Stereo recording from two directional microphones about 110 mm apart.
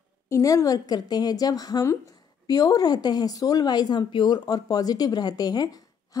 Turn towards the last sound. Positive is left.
turn(degrees=35)  # may be behind; listen again after turning